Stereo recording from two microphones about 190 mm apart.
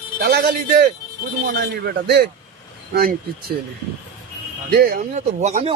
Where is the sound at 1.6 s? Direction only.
60° right (ahead or behind).